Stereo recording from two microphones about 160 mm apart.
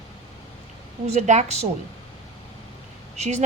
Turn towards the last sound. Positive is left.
turn(degrees=-45)  # may be behind; listen again after turning